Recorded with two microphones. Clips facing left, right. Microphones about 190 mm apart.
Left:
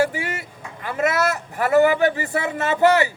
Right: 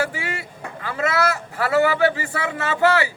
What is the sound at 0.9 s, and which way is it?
A man's voice, 20° left (ahead or behind).